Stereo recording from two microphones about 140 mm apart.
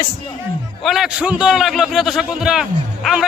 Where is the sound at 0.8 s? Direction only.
Centre (ahead or behind).